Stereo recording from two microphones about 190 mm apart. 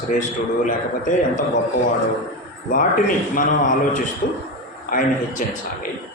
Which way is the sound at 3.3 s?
45° left (ahead or behind).